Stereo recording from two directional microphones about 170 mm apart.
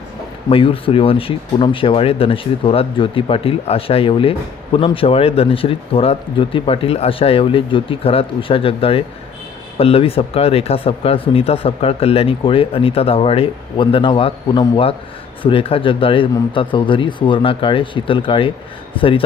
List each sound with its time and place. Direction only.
0.5 s speech: 35° left (ahead or behind)